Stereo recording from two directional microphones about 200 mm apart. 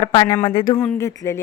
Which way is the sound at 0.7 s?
10° left (ahead or behind).